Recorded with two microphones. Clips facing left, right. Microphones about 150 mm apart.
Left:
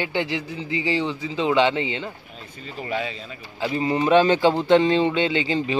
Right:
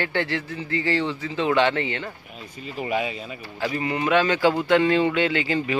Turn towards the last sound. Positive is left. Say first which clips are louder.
# left 1 dB
turn(degrees=20)  # may be behind; listen again after turning